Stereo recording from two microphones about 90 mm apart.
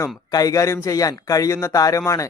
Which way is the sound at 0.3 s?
40° left (ahead or behind).